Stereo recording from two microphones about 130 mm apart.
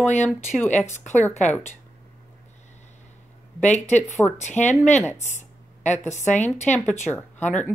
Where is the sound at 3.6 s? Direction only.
65° left (ahead or behind).